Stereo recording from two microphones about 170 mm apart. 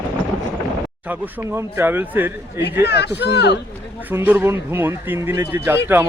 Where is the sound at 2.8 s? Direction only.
80° left.